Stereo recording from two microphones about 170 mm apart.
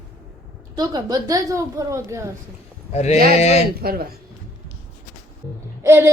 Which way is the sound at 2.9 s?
40° left (ahead or behind).